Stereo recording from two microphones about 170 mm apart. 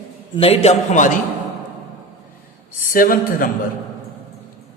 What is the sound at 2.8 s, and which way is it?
Speech, 55° left (ahead or behind).